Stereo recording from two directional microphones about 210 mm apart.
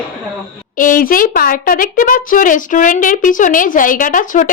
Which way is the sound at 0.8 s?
40° left (ahead or behind).